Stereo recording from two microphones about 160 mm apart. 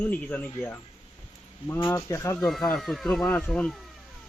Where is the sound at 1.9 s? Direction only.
15° left (ahead or behind).